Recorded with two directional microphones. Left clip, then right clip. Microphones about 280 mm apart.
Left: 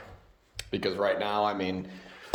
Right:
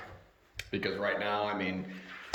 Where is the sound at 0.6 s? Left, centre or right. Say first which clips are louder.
Left 5 dB; centre.